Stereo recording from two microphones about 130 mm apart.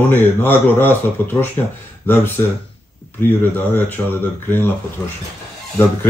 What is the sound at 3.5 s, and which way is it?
Speech, 15° left (ahead or behind).